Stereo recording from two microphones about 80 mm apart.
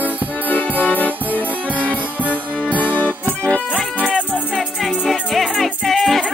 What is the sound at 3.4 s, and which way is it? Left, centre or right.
Music, centre.